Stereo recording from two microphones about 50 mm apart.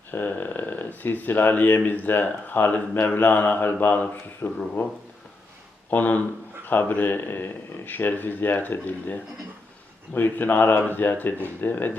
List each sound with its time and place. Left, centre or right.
0.1 s speech: left
5.9 s speech: left
10.2 s speech: left